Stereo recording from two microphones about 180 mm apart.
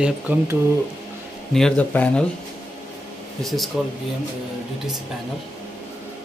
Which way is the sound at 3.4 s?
Centre (ahead or behind).